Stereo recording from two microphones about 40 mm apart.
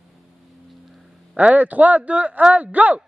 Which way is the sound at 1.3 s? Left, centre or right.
Right.